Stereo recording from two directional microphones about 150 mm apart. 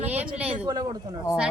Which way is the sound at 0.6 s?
25° right (ahead or behind).